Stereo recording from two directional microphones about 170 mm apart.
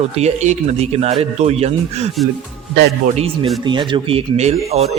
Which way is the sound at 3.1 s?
35° right (ahead or behind).